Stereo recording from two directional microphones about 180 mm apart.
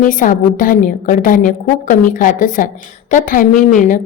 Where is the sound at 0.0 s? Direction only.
45° left (ahead or behind).